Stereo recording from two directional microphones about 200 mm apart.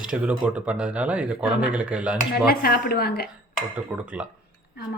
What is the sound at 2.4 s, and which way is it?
Speech, 50° left (ahead or behind).